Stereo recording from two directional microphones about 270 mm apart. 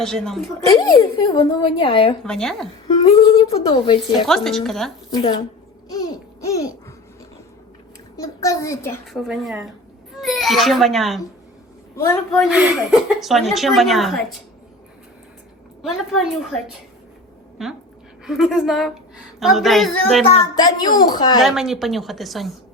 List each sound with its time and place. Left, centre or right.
0.0 s a woman's voice: centre
0.7 s speech: centre
2.2 s a woman's voice: centre
2.8 s humming: centre
3.8 s a woman's voice: centre
4.3 s a woman's voice: centre
5.1 s a woman's voice: centre
5.9 s babbling: centre
8.1 s a woman's voice: centre
15.8 s a woman's voice: centre
20.3 s a woman's voice: centre
21.4 s a woman's voice: centre